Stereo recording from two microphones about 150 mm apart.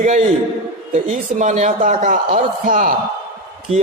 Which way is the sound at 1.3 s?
50° right (ahead or behind).